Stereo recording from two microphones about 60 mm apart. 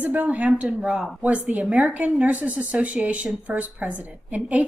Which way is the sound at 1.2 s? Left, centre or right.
Right.